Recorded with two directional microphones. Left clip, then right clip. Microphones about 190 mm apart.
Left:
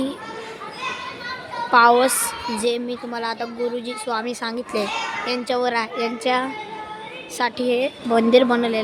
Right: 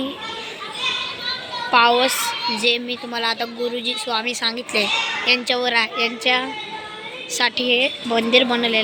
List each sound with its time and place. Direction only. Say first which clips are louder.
1.7 s a child's voice: left 1 dB; 20° left (ahead or behind)